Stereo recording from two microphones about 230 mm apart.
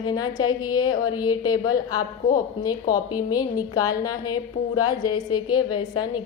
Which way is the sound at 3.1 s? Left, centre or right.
Centre.